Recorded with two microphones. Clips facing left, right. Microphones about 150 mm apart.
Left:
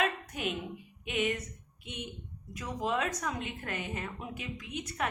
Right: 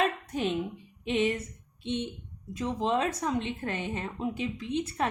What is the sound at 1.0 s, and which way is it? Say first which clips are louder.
A woman's voice: right 5 dB; 30° right (ahead or behind).